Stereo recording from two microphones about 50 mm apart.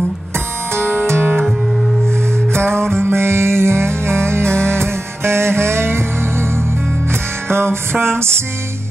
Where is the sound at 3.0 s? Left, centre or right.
Right.